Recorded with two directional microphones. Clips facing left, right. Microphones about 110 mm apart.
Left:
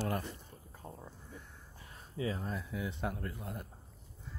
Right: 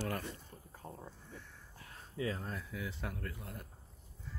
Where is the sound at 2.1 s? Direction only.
15° left (ahead or behind).